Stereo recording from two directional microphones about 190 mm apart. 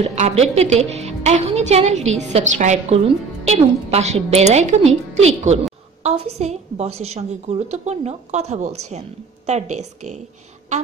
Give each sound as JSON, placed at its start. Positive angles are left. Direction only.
{"t": 0.1, "sound": "a woman's voice", "side_deg": -35}